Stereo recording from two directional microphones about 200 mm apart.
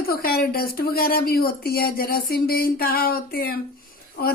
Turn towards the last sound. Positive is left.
turn(degrees=50)  # may be behind; listen again after turning